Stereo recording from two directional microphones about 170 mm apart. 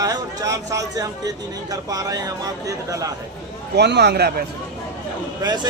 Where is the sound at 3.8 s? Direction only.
75° right (ahead or behind).